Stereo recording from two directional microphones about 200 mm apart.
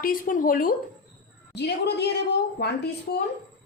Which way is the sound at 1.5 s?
55° left (ahead or behind).